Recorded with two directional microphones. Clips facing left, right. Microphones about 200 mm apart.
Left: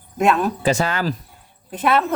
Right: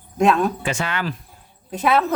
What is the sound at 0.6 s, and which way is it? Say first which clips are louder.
Speech: left 5 dB; 35° left (ahead or behind).